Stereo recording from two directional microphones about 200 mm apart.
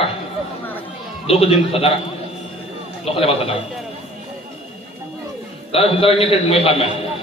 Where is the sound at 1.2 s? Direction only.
30° left (ahead or behind).